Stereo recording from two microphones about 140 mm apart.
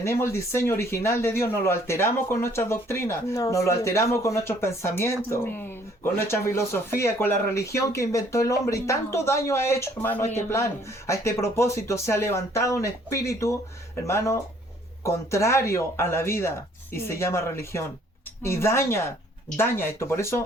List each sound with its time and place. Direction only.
0.0 s speech: 20° left (ahead or behind)